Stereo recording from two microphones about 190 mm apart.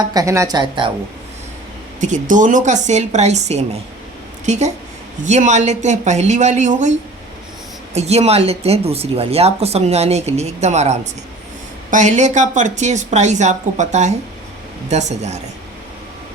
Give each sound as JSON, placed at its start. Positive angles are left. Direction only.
{"t": 0.1, "sound": "speech", "side_deg": -15}
{"t": 2.0, "sound": "speech", "side_deg": -40}
{"t": 7.9, "sound": "speech", "side_deg": -35}